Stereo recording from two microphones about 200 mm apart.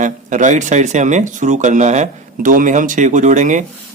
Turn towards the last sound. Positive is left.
turn(degrees=-35)  # may be behind; listen again after turning